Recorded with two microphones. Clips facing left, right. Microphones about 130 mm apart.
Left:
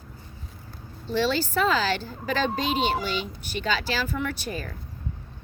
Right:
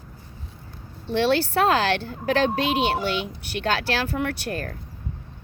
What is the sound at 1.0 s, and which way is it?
Speech, 60° right (ahead or behind).